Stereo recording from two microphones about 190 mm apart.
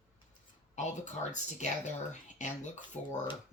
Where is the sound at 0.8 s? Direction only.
40° left (ahead or behind).